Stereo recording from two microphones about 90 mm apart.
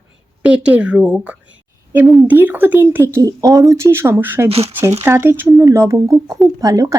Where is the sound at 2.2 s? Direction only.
20° right (ahead or behind).